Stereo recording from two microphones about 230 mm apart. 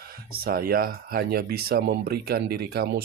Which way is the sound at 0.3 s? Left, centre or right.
Right.